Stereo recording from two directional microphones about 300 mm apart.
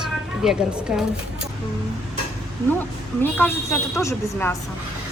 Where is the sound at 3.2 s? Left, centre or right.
Centre.